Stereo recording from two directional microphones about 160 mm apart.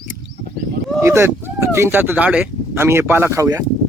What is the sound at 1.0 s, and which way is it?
Speech, 15° right (ahead or behind).